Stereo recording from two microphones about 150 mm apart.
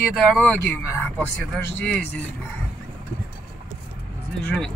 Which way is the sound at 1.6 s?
5° left (ahead or behind).